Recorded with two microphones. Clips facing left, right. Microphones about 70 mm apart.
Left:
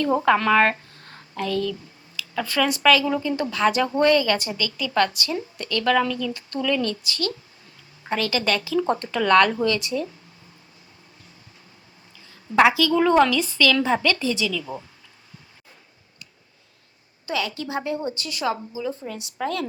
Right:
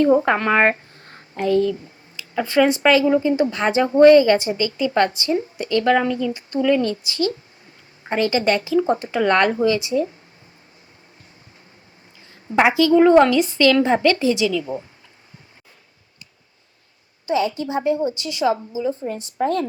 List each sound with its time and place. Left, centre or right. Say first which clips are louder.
0.0 s speech: right 3 dB; right
8.8 s speech: right 4 dB; centre
12.3 s speech: even; centre
17.2 s speech: right 7 dB; right
19.0 s a woman's voice: right 6 dB; right